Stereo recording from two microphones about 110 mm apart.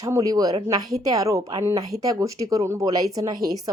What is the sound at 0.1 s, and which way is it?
Speech, 30° right (ahead or behind).